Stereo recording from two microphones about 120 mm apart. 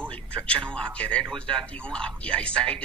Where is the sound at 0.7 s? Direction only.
10° left (ahead or behind).